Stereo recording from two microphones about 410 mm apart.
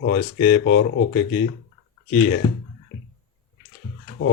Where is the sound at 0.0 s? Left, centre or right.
Left.